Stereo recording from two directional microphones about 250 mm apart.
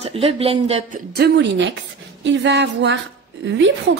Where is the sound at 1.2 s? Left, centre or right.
Right.